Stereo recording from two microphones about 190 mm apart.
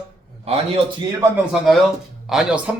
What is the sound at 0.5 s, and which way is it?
Speech, 30° right (ahead or behind).